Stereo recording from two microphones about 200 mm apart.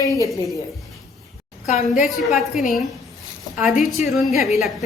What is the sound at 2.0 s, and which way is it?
Speech, centre (ahead or behind).